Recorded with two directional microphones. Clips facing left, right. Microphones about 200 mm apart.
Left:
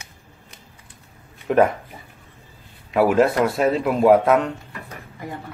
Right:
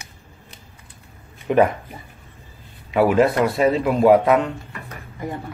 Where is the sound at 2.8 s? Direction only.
Centre (ahead or behind).